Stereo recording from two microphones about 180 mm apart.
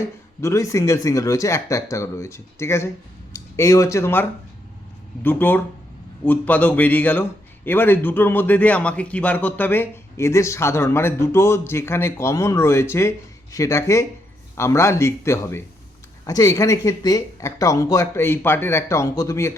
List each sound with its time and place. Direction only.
0.4 s a man's voice: 15° left (ahead or behind)